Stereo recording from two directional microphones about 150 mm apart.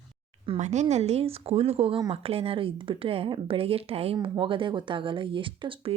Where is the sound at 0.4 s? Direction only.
45° right (ahead or behind).